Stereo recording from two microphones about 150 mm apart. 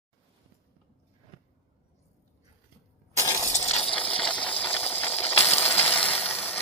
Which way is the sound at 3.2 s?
20° left (ahead or behind).